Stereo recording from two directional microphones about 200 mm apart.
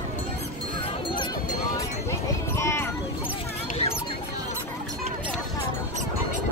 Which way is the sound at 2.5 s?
15° left (ahead or behind).